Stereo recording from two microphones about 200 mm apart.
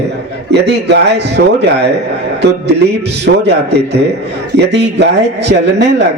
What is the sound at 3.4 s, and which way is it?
Speech, 55° right (ahead or behind).